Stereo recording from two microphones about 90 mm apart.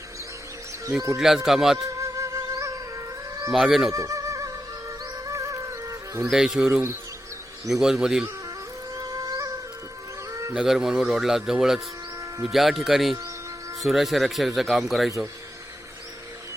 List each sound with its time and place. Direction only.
1.2 s speech: 5° right (ahead or behind)
1.8 s music: 35° right (ahead or behind)
3.5 s speech: 5° right (ahead or behind)
3.9 s music: 35° right (ahead or behind)
6.3 s speech: 5° right (ahead or behind)
9.0 s music: 40° right (ahead or behind)
10.5 s speech: 5° right (ahead or behind)